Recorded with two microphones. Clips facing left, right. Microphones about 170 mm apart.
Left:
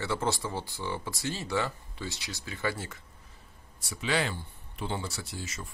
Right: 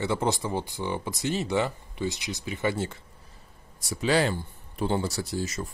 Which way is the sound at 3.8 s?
40° right (ahead or behind).